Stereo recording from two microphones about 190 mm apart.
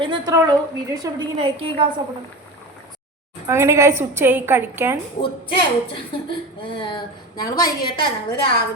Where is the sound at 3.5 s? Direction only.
15° right (ahead or behind).